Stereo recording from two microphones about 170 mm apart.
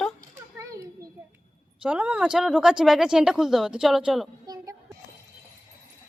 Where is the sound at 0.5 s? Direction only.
20° right (ahead or behind).